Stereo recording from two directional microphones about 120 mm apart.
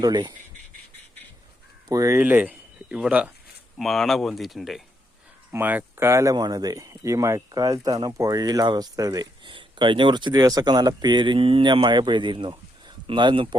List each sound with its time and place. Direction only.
0.0 s speech: 35° right (ahead or behind)
1.9 s speech: 25° right (ahead or behind)
2.2 s speech: 15° right (ahead or behind)
3.8 s speech: centre (ahead or behind)
5.5 s speech: 15° right (ahead or behind); by 9.5 s 30° right (ahead or behind)
9.5 s speech: 40° right (ahead or behind)